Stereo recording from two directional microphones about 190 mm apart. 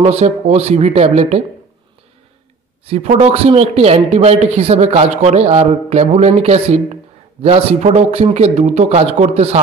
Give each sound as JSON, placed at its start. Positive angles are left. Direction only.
{"t": 0.0, "sound": "a man's voice", "side_deg": -35}
{"t": 2.9, "sound": "a man's voice", "side_deg": -35}